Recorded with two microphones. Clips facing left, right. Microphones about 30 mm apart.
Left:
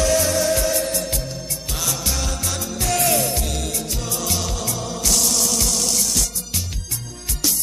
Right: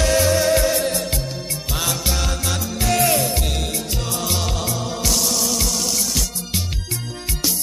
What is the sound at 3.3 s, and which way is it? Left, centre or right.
Music, right.